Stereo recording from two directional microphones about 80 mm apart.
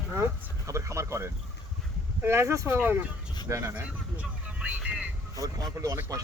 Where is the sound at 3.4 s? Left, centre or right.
Right.